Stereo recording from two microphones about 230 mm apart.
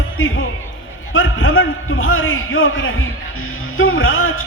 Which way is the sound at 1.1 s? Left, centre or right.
Left.